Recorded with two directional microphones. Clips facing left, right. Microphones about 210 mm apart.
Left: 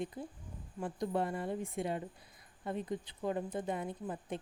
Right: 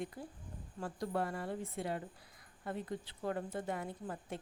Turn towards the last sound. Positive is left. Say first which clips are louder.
# left 3 dB
turn(degrees=20)  # may be behind; listen again after turning